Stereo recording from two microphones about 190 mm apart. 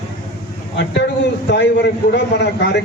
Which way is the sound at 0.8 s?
65° left (ahead or behind).